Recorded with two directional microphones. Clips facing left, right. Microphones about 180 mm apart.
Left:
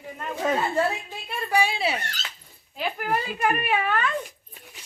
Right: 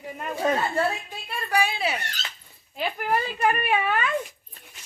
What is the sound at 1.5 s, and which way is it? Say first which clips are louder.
Speech: left 1 dB; 25° left (ahead or behind).